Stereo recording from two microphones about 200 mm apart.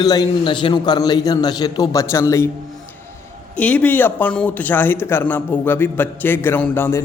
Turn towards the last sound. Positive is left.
turn(degrees=10)  # may be behind; listen again after turning